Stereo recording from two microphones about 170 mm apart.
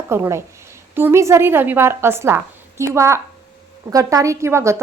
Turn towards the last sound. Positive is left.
turn(degrees=-15)  # may be behind; listen again after turning